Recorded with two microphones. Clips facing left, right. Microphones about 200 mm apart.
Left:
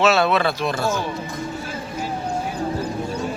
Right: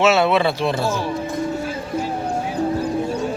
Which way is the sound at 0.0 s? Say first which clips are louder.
Right 2 dB; 25° right (ahead or behind).